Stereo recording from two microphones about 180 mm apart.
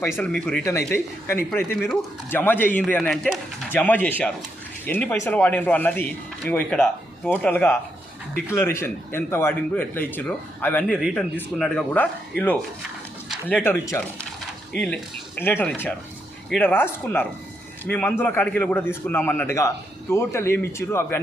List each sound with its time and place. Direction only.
0.2 s speech: 5° left (ahead or behind)
13.2 s a sound: centre (ahead or behind)
13.7 s speech: 10° left (ahead or behind)
15.4 s speech: 10° left (ahead or behind)